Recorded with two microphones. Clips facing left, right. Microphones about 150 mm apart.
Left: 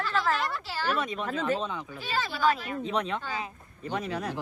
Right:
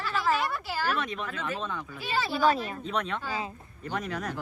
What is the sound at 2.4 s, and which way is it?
Speech, 30° right (ahead or behind).